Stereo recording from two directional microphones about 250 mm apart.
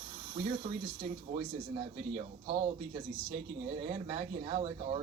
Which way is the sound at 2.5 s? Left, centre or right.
Right.